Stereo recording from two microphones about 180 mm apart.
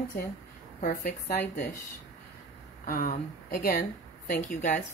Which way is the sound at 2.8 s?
50° left (ahead or behind).